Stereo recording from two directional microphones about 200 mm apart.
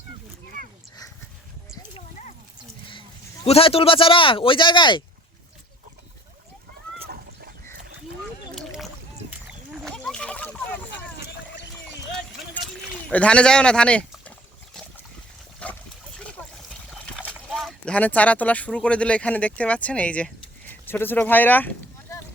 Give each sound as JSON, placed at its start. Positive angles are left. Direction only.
{"t": 3.4, "sound": "speech", "side_deg": 30}
{"t": 7.0, "sound": "a sound", "side_deg": -50}
{"t": 8.5, "sound": "rowboat", "side_deg": 0}
{"t": 9.5, "sound": "a sound", "side_deg": 0}
{"t": 12.9, "sound": "rowboat", "side_deg": 5}
{"t": 15.6, "sound": "splash", "side_deg": 5}
{"t": 16.6, "sound": "speech", "side_deg": 0}